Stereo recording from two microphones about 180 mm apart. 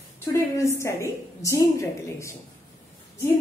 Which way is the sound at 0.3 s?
15° left (ahead or behind).